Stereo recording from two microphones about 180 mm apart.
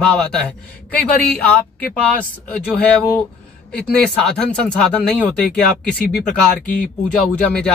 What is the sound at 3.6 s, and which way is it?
Speech, 5° left (ahead or behind).